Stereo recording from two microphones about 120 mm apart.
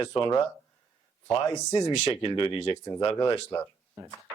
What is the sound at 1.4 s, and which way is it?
Speech, 30° left (ahead or behind).